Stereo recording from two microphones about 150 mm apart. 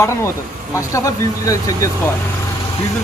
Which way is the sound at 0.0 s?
20° left (ahead or behind).